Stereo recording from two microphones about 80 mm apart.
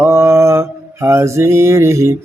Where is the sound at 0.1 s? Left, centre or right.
Right.